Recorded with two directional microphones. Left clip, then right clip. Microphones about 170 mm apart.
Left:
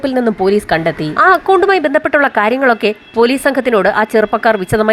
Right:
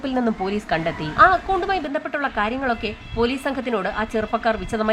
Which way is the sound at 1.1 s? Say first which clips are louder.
Left 6 dB; 45° left (ahead or behind).